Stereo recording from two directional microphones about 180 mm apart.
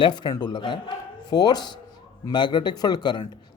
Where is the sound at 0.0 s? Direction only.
25° left (ahead or behind).